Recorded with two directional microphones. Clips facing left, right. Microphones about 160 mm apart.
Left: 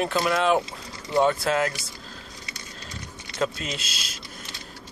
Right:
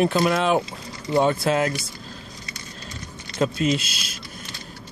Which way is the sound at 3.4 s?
15° right (ahead or behind).